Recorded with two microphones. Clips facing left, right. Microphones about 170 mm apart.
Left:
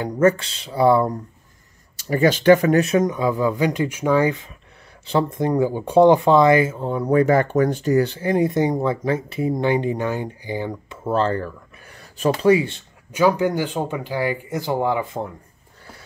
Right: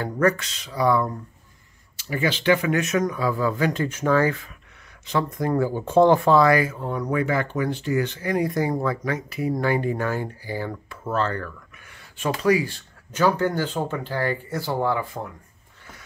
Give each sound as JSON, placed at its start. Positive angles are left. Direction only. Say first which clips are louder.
{"t": 0.0, "sound": "speech", "louder": "left 4 dB", "side_deg": 20}
{"t": 2.0, "sound": "speech", "louder": "left 7 dB", "side_deg": 40}
{"t": 5.0, "sound": "speech", "louder": "left 4 dB", "side_deg": 30}
{"t": 5.5, "sound": "speech", "louder": "left 1 dB", "side_deg": 15}
{"t": 13.1, "sound": "speech", "louder": "left 3 dB", "side_deg": 10}